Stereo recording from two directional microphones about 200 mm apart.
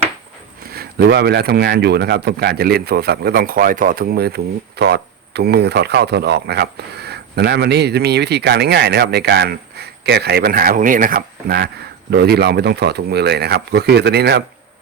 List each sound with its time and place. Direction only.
0.7 s a man's voice: 50° right (ahead or behind)